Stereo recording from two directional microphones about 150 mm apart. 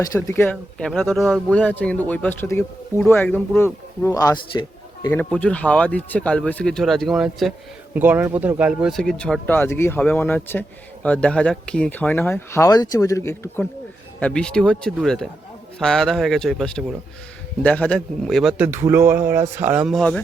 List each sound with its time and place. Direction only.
0.0 s speech: 20° left (ahead or behind)
0.5 s speech: centre (ahead or behind); by 4.6 s 25° left (ahead or behind)
5.3 s speech: 10° left (ahead or behind)
7.9 s speech: 10° right (ahead or behind)
8.9 s speech: 5° left (ahead or behind)
18.5 s speech: 15° right (ahead or behind)
19.9 s speech: 5° left (ahead or behind)